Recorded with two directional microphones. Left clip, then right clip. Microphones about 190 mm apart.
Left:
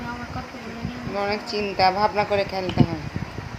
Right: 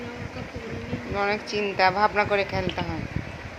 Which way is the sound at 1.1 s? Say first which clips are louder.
Even; centre (ahead or behind).